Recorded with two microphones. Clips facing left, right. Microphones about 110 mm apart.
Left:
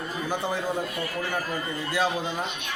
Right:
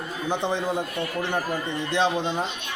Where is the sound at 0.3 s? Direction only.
20° right (ahead or behind).